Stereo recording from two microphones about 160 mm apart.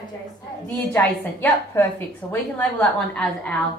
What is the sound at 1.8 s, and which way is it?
A woman's voice, 15° left (ahead or behind).